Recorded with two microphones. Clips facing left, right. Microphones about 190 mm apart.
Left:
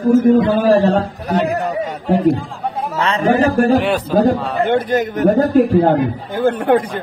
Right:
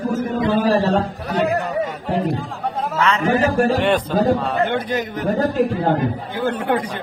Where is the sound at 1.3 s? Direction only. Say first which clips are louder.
Left 2 dB; 45° left (ahead or behind).